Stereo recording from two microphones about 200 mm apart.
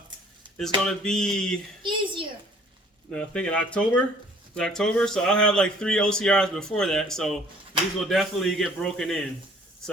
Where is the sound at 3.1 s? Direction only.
5° left (ahead or behind).